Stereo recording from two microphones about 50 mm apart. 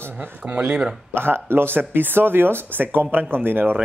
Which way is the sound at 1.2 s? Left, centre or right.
Right.